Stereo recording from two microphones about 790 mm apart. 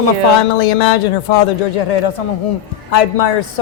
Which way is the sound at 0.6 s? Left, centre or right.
Left.